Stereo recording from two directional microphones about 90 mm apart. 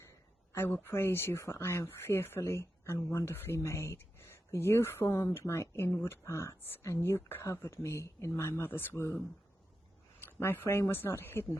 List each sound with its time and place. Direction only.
0.5 s speech: 25° left (ahead or behind)